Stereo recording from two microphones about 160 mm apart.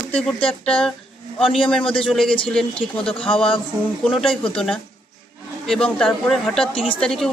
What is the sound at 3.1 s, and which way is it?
Speech, 35° left (ahead or behind).